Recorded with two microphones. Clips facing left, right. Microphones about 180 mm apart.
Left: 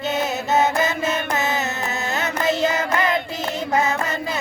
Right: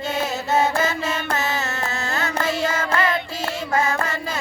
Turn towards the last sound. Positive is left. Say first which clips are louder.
# left 1 dB
turn(degrees=20)  # may be behind; listen again after turning